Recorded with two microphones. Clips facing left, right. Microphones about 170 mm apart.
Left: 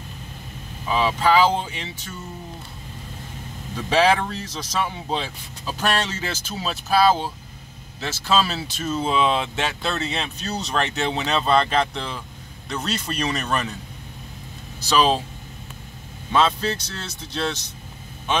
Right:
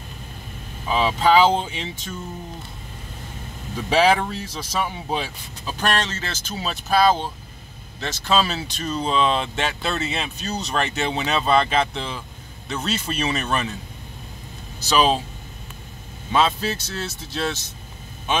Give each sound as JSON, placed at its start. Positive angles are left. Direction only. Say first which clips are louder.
{"t": 0.8, "sound": "speech", "louder": "right 1 dB", "side_deg": -20}
{"t": 3.9, "sound": "speech", "louder": "right 1 dB", "side_deg": -10}
{"t": 5.7, "sound": "speech", "louder": "even", "side_deg": 5}
{"t": 16.3, "sound": "speech", "louder": "even", "side_deg": -5}